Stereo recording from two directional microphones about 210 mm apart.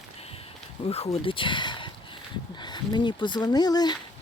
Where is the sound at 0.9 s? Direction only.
30° left (ahead or behind).